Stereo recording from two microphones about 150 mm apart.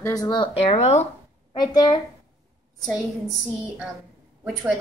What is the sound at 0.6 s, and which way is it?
Speech, 45° left (ahead or behind).